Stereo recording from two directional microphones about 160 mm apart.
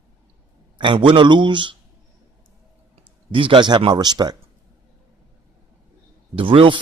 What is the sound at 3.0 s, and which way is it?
Speech, 35° right (ahead or behind).